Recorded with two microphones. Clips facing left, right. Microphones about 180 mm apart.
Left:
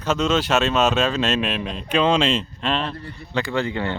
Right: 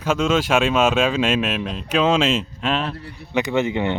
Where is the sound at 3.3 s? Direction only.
20° right (ahead or behind).